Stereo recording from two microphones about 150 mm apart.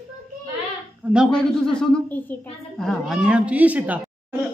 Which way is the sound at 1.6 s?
5° left (ahead or behind).